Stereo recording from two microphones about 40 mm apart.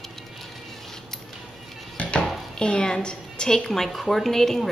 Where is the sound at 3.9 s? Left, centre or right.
Centre.